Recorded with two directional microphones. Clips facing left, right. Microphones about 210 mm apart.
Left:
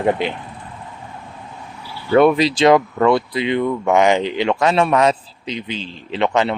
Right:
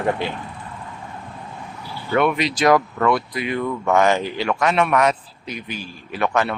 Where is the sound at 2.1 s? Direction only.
35° left (ahead or behind).